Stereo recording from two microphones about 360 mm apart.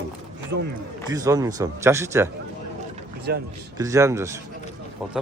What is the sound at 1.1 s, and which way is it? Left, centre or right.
Speech, centre.